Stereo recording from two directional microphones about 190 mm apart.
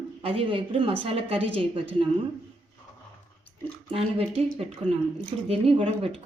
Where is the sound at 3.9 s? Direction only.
30° right (ahead or behind).